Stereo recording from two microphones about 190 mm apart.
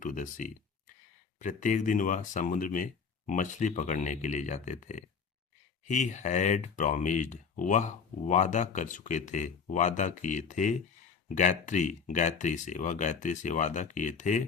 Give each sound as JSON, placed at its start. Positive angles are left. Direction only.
{"t": 0.0, "sound": "speech", "side_deg": 45}